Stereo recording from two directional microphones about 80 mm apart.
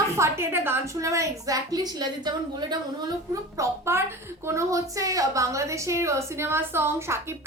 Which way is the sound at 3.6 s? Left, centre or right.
Right.